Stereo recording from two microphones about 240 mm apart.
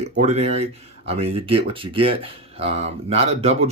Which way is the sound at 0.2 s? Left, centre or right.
Right.